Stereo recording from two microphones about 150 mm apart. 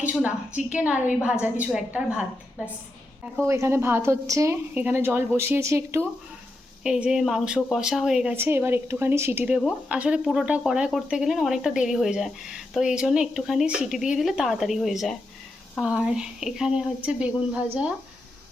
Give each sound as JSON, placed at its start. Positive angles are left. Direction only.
{"t": 0.0, "sound": "a woman's voice", "side_deg": -10}
{"t": 3.4, "sound": "a woman's voice", "side_deg": -20}
{"t": 6.8, "sound": "a woman's voice", "side_deg": -5}